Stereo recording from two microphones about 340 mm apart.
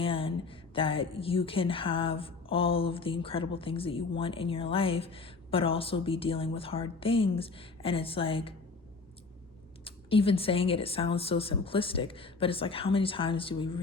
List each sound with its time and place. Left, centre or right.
0.0 s a woman's voice: centre
9.8 s a woman's voice: centre